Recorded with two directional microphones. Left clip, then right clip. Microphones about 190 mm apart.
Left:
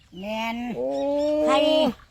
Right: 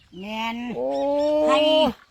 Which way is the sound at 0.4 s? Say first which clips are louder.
Right 1 dB; 35° left (ahead or behind).